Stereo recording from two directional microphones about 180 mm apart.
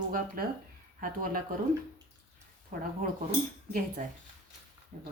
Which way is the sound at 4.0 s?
45° right (ahead or behind).